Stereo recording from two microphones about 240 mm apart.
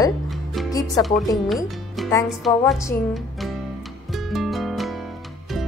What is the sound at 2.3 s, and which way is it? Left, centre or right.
Speech, centre.